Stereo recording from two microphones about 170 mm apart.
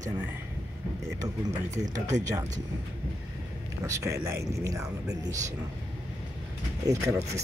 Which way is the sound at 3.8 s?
15° right (ahead or behind).